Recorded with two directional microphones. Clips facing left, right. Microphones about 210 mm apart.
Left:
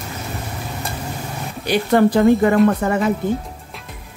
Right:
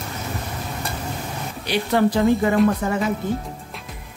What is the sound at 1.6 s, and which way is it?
A woman's voice, 50° left (ahead or behind).